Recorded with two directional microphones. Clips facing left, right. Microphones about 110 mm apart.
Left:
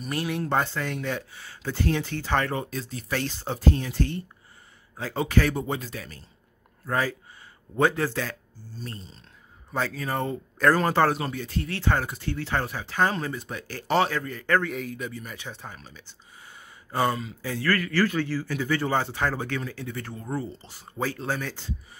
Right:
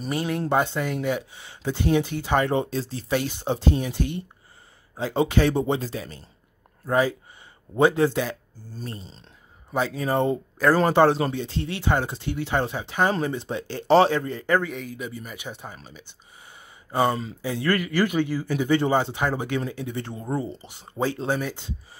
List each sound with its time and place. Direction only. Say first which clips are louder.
0.1 s speech: right 3 dB; centre (ahead or behind)
0.5 s a man's voice: right 5 dB; 15° right (ahead or behind); by 3.1 s 30° right (ahead or behind)
3.1 s a man's voice: right 5 dB; 15° right (ahead or behind)
14.6 s a man's voice: even; centre (ahead or behind); by 16.2 s 15° right (ahead or behind)
17.4 s a man's voice: right 2 dB; 15° right (ahead or behind)